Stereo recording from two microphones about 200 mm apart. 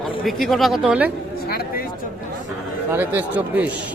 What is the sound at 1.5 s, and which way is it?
Speech, 50° left (ahead or behind).